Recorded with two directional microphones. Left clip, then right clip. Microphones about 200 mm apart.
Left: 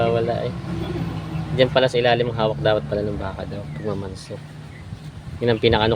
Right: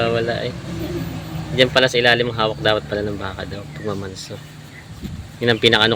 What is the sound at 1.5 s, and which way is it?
Speech, centre (ahead or behind).